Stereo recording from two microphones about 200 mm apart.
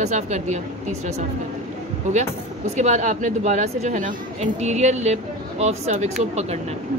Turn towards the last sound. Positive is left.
turn(degrees=-35)  # may be behind; listen again after turning